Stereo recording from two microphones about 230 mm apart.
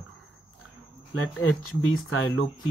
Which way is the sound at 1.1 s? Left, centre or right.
Left.